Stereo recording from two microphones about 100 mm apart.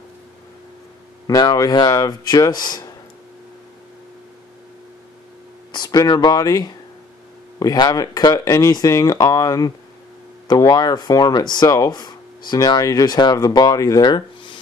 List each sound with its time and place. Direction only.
1.2 s speech: 40° left (ahead or behind)
5.7 s speech: 45° left (ahead or behind)